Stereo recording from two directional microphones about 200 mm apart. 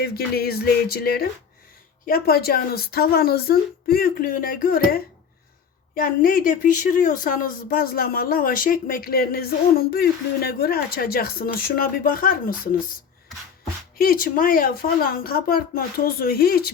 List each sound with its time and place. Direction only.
0.0 s speech: 50° left (ahead or behind)
14.0 s speech: 45° left (ahead or behind)